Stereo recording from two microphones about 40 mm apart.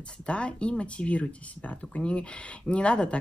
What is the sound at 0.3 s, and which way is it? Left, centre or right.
Speech, left.